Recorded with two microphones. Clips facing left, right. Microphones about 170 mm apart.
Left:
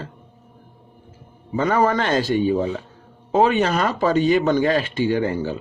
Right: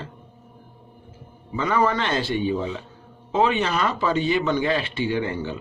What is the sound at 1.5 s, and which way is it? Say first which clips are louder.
Speech: left 3 dB; 45° left (ahead or behind).